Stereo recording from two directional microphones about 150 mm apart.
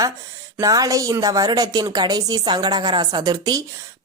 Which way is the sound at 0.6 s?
25° right (ahead or behind).